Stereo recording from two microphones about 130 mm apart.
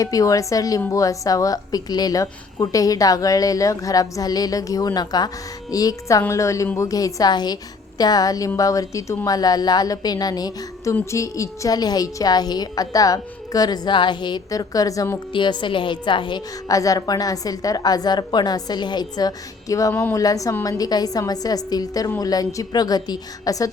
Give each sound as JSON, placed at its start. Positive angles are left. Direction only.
{"t": 0.0, "sound": "a woman's voice", "side_deg": 25}
{"t": 15.3, "sound": "a woman's voice", "side_deg": 40}
{"t": 19.9, "sound": "a woman's voice", "side_deg": 15}
{"t": 20.1, "sound": "a woman's voice", "side_deg": 25}